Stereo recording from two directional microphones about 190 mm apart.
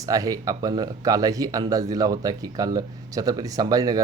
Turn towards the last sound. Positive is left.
turn(degrees=-20)  # may be behind; listen again after turning